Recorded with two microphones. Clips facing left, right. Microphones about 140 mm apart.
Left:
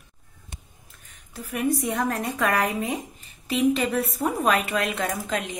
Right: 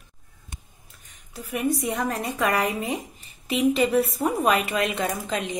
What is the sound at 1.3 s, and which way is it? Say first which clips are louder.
Speech: even; centre (ahead or behind).